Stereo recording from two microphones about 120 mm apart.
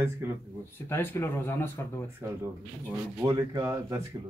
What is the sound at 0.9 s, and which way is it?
Speech, 20° left (ahead or behind).